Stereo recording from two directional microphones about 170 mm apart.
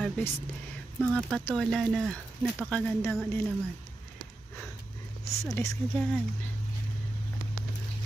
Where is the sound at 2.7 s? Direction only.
10° left (ahead or behind).